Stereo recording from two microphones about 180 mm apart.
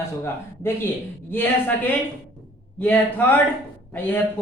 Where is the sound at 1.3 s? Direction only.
10° left (ahead or behind).